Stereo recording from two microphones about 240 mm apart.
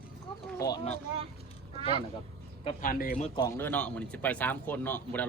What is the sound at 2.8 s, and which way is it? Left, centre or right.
Speech, left.